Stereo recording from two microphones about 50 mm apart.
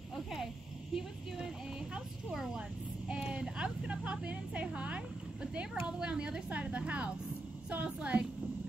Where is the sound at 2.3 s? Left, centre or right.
Centre.